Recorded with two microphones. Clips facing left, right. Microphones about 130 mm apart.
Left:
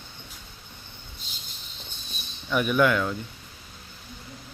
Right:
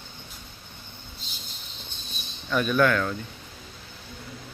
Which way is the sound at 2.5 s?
15° left (ahead or behind).